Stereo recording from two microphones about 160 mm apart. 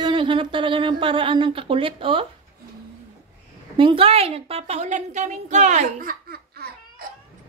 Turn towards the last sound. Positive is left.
turn(degrees=-75)  # may be behind; listen again after turning